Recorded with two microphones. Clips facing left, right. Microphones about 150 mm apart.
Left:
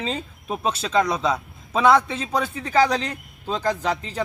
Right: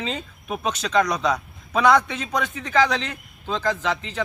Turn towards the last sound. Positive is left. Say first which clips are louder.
# left 1 dB
turn(degrees=35)  # may be behind; listen again after turning